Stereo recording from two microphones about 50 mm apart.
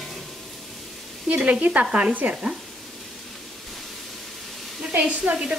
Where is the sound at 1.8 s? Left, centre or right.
Right.